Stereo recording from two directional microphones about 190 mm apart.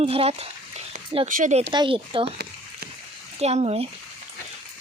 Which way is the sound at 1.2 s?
45° right (ahead or behind).